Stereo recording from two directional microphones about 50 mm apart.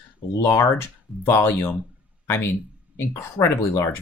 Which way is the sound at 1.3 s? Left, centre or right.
Left.